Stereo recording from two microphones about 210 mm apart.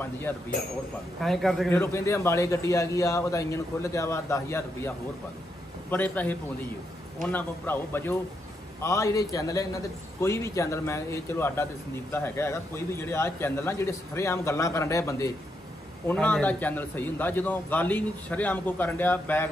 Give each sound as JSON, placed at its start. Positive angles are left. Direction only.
{"t": 1.2, "sound": "a man's voice", "side_deg": 0}